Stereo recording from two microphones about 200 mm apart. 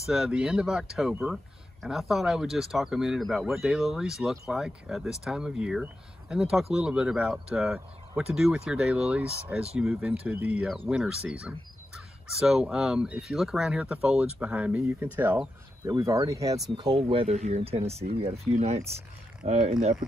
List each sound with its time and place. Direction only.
0.0 s speech: centre (ahead or behind); by 20.0 s 35° right (ahead or behind)